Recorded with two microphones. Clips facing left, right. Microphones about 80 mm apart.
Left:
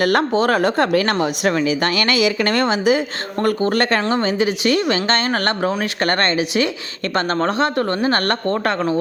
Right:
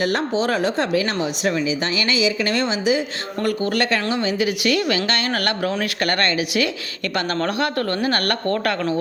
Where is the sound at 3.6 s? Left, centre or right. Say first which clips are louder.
Left 3 dB; left.